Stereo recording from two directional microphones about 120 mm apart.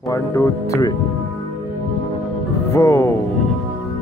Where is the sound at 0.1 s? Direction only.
25° left (ahead or behind).